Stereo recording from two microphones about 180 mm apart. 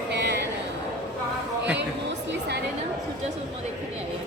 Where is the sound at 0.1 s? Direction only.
70° right (ahead or behind).